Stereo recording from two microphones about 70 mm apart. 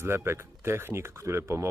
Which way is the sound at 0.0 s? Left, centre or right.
Right.